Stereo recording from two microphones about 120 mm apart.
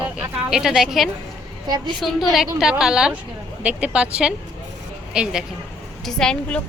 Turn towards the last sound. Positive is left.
turn(degrees=10)  # may be behind; listen again after turning